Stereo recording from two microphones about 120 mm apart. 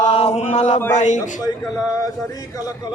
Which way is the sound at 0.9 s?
90° left.